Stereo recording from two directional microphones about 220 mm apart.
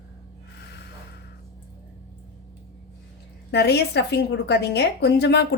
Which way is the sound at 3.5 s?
50° left (ahead or behind).